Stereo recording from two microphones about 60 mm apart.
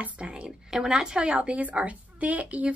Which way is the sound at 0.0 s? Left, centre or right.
Centre.